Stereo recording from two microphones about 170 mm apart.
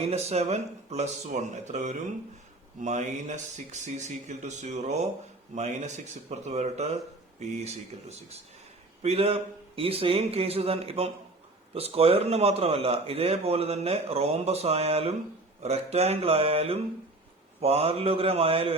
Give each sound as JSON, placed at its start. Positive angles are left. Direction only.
{"t": 0.1, "sound": "a man's voice", "side_deg": -40}
{"t": 9.0, "sound": "a man's voice", "side_deg": -35}